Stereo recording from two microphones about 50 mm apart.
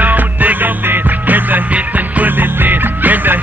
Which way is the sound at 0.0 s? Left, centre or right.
Right.